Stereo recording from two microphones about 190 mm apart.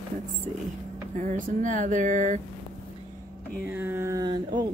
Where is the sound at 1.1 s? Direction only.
45° right (ahead or behind).